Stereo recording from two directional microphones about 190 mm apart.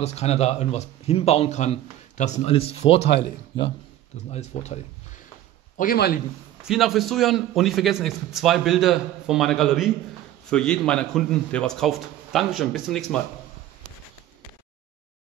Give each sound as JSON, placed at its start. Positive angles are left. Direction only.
{"t": 0.0, "sound": "speech", "side_deg": 35}
{"t": 4.3, "sound": "speech", "side_deg": 35}
{"t": 5.8, "sound": "speech", "side_deg": 55}
{"t": 6.6, "sound": "a man's voice", "side_deg": 0}